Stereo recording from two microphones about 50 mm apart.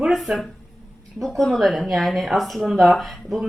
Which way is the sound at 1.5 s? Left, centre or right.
Centre.